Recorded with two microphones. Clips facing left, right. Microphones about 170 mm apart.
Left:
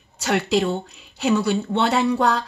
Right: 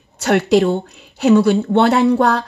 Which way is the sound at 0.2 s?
50° right (ahead or behind).